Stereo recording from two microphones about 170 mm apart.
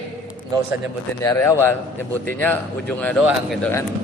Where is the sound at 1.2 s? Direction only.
15° left (ahead or behind); by 3.7 s centre (ahead or behind).